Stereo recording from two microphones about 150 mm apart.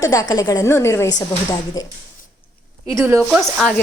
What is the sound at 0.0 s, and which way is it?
A woman's voice, 25° left (ahead or behind).